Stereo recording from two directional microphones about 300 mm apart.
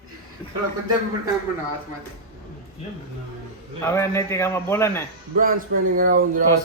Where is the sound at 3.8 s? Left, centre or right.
Centre.